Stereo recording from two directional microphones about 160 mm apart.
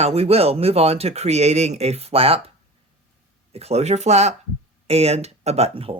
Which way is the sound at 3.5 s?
40° right (ahead or behind).